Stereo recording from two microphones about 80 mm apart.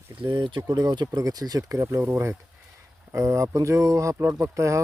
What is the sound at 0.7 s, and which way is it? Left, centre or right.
Speech, right.